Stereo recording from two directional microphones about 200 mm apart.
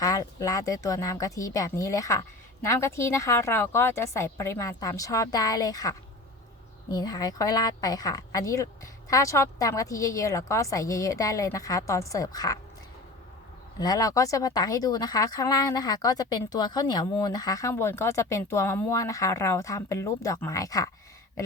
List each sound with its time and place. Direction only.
0.0 s speech: 15° left (ahead or behind)
13.7 s speech: 20° left (ahead or behind)